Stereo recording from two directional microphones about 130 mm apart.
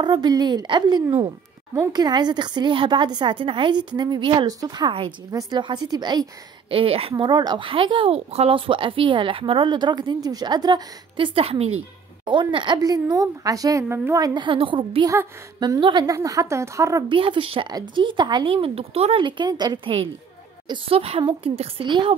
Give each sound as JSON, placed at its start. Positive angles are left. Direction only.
{"t": 0.0, "sound": "speech", "side_deg": -35}
{"t": 6.7, "sound": "speech", "side_deg": -45}
{"t": 12.3, "sound": "a woman's voice", "side_deg": -40}
{"t": 17.1, "sound": "a woman's voice", "side_deg": -40}